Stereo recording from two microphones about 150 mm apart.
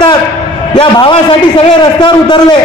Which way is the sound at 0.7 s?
35° left (ahead or behind).